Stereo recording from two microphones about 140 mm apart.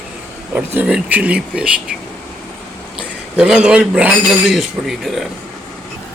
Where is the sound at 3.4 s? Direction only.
10° right (ahead or behind).